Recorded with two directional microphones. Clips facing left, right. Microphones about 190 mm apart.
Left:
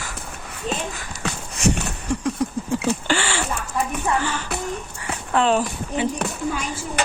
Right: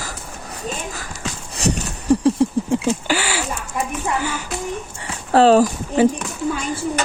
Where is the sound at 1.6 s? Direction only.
35° right (ahead or behind).